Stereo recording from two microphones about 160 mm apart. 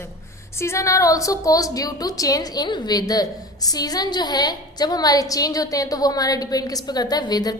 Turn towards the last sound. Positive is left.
turn(degrees=25)  # may be behind; listen again after turning